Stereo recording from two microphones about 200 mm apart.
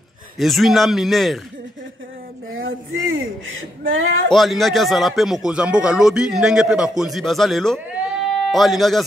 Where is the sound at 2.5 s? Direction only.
85° right.